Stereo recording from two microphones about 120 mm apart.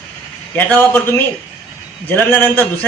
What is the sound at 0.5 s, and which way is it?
A man's voice, 15° left (ahead or behind).